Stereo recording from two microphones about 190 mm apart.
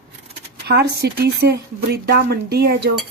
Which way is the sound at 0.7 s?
60° right (ahead or behind).